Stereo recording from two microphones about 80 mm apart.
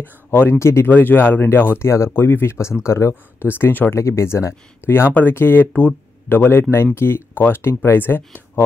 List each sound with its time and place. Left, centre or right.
0.3 s speech: left
3.4 s speech: left